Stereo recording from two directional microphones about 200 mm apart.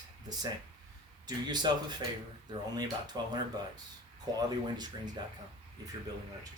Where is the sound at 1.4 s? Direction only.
20° right (ahead or behind).